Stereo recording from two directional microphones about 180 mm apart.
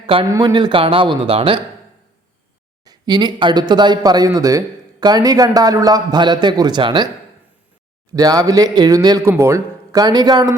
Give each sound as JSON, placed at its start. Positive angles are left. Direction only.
{"t": 0.0, "sound": "a man's voice", "side_deg": -30}
{"t": 2.8, "sound": "speech", "side_deg": -20}
{"t": 8.1, "sound": "speech", "side_deg": -20}